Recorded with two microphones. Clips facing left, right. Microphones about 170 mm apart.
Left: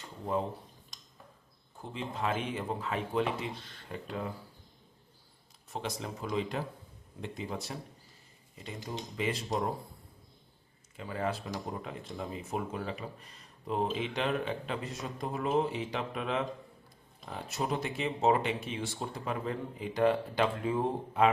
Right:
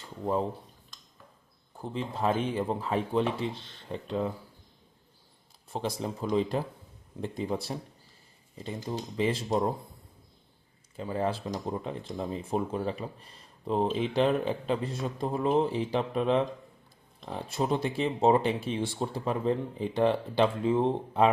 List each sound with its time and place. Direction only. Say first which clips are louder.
1.8 s speech: right 5 dB; 35° right (ahead or behind)
5.7 s speech: right 5 dB; 30° right (ahead or behind)
10.9 s speech: right 4 dB; 30° right (ahead or behind)